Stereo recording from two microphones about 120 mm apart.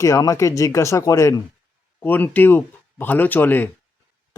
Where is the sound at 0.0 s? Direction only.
25° left (ahead or behind).